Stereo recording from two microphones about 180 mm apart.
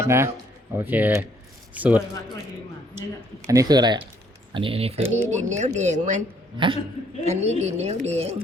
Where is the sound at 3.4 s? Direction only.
20° right (ahead or behind); by 6.2 s 40° right (ahead or behind).